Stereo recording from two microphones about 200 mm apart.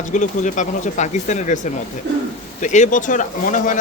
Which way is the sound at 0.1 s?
40° left (ahead or behind).